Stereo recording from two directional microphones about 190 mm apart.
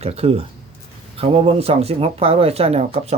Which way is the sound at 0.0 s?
35° right (ahead or behind).